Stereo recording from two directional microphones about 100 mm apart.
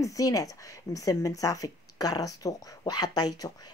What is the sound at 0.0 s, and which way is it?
Speech, 35° left (ahead or behind).